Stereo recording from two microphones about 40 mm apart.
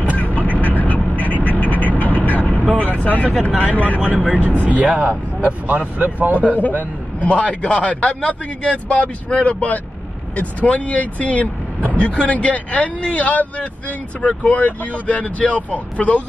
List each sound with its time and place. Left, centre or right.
0.2 s vehicle: left
2.8 s a man's voice: left
4.8 s speech: right
5.7 s speech: right
7.2 s a man's voice: left